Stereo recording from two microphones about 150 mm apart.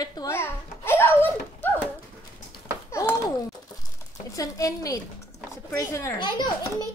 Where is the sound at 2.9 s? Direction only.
20° left (ahead or behind).